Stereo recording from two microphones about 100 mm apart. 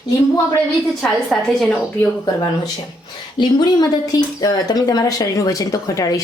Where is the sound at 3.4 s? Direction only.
45° left (ahead or behind).